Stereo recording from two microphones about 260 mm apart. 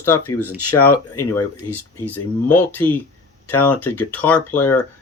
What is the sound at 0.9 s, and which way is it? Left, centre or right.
Speech, left.